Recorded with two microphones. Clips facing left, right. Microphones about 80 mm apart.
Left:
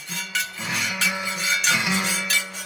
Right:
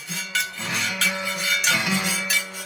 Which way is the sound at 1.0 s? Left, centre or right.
Left.